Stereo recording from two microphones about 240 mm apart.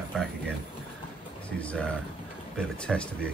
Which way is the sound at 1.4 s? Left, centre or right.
Centre.